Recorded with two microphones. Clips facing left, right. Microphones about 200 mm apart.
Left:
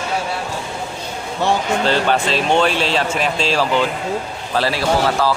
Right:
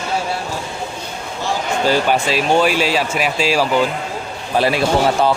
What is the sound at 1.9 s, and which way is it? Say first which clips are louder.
Speech: right 2 dB; 10° right (ahead or behind).